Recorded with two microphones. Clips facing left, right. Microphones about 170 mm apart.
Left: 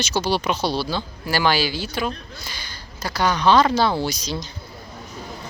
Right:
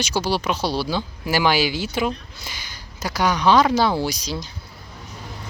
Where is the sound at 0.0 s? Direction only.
10° right (ahead or behind).